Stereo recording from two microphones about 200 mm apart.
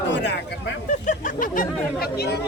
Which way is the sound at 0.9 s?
40° left (ahead or behind).